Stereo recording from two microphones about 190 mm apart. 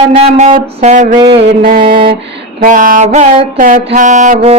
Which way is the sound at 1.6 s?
45° right (ahead or behind).